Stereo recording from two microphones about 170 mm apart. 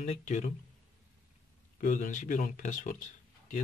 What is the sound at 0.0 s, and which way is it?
Speech, 45° left (ahead or behind).